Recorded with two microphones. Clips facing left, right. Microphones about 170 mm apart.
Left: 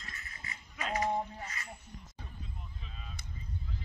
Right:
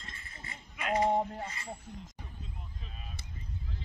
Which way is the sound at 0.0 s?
25° right (ahead or behind).